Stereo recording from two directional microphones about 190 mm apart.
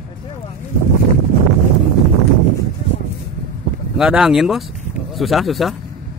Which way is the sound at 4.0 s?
5° right (ahead or behind).